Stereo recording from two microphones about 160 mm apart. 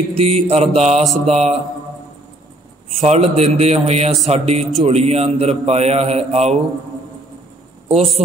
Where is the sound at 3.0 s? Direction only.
40° right (ahead or behind).